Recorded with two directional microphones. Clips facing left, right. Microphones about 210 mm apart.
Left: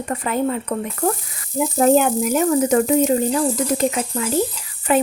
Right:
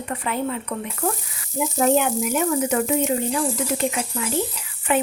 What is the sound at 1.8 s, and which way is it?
A woman's voice, 40° left (ahead or behind).